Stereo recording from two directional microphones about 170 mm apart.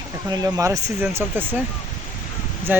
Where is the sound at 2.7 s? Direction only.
10° right (ahead or behind).